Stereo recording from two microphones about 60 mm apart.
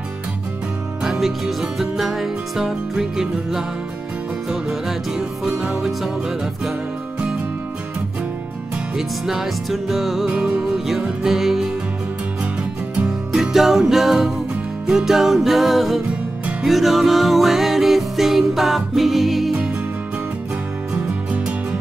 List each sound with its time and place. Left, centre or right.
1.0 s music: centre
8.9 s music: centre
10.2 s music: centre
11.0 s music: centre
13.3 s music: centre